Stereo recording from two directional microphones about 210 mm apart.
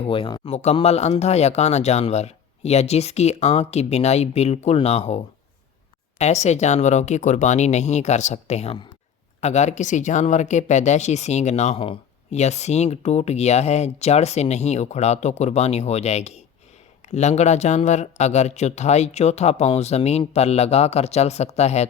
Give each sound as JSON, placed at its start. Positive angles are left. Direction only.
{"t": 0.0, "sound": "a man's voice", "side_deg": 25}